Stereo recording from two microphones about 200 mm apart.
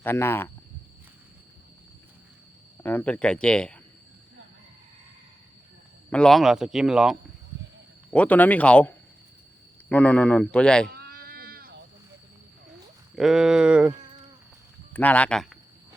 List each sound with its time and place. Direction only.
0.0 s speech: 10° left (ahead or behind)
2.8 s speech: 10° left (ahead or behind)
6.1 s speech: 5° left (ahead or behind)
10.9 s a sound: 50° right (ahead or behind)
13.1 s speech: 5° right (ahead or behind)
14.9 s speech: 5° left (ahead or behind)